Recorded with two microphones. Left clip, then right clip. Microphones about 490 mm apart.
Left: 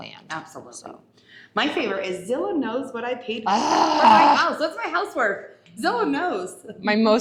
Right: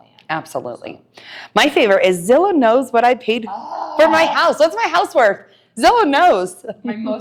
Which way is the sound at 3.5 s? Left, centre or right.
Left.